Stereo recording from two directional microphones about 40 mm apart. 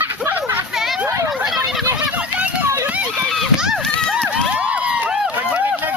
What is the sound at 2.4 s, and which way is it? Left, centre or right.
Run, right.